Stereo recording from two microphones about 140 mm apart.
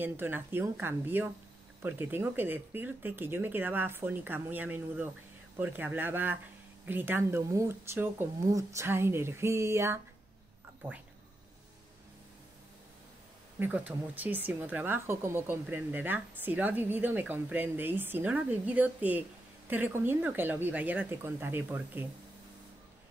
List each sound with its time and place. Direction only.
0.0 s a woman's voice: 15° right (ahead or behind)
13.6 s a woman's voice: 10° right (ahead or behind)